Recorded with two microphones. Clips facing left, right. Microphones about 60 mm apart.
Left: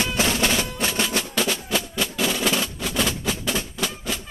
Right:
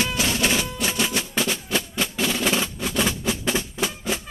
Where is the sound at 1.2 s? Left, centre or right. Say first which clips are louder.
Left 1 dB; centre.